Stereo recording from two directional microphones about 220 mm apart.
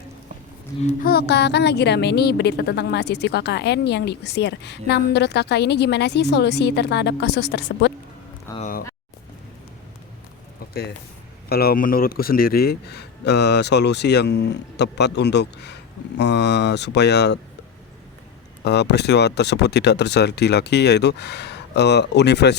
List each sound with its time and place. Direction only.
0.7 s speech: 20° left (ahead or behind)
1.0 s a woman's voice: 45° left (ahead or behind)
8.5 s a sound: 35° left (ahead or behind)
11.4 s a woman's voice: 45° left (ahead or behind)
18.6 s a woman's voice: 50° left (ahead or behind)